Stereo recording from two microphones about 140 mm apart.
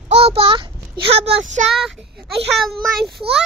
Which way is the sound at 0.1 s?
45° right (ahead or behind).